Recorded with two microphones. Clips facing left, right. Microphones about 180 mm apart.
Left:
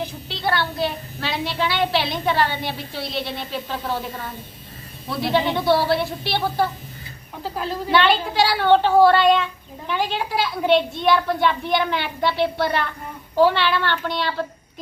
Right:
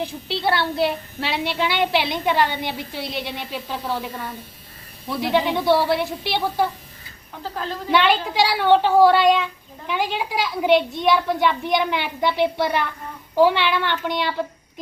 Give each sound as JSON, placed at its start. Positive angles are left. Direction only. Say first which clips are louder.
{"t": 0.3, "sound": "a woman's voice", "louder": "right 2 dB", "side_deg": -30}
{"t": 5.0, "sound": "a woman's voice", "louder": "even", "side_deg": -15}
{"t": 7.4, "sound": "a woman's voice", "louder": "left 2 dB", "side_deg": 15}
{"t": 7.9, "sound": "a woman's voice", "louder": "even", "side_deg": -15}